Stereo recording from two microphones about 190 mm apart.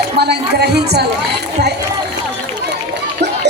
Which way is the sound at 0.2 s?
60° right (ahead or behind).